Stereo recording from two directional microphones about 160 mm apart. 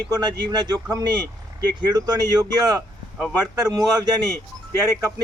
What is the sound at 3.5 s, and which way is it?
Speech, 25° right (ahead or behind).